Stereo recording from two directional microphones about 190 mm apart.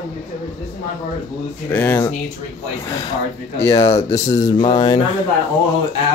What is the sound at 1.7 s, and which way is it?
Speech, 10° left (ahead or behind).